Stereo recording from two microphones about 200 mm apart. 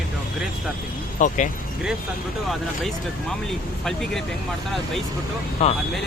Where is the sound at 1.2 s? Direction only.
40° left (ahead or behind).